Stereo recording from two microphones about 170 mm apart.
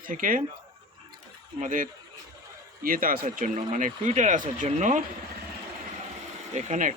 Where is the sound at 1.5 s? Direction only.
50° right (ahead or behind).